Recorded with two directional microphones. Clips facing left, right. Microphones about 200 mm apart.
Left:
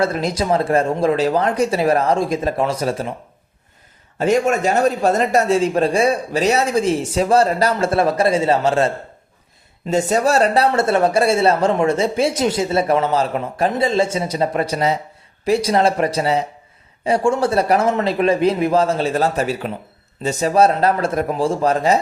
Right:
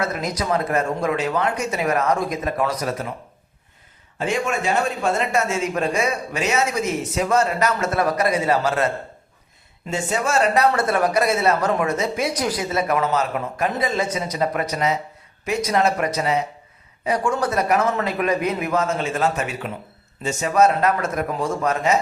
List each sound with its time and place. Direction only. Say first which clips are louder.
0.0 s speech: left 5 dB; 30° left (ahead or behind)
4.2 s speech: left 7 dB; 40° left (ahead or behind)
9.9 s speech: left 6 dB; 40° left (ahead or behind)